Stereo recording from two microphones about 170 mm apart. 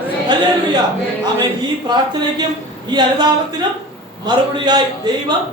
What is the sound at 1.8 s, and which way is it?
A woman's voice, 25° right (ahead or behind).